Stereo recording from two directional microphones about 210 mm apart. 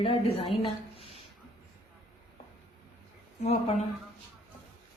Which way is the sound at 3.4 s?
30° left (ahead or behind).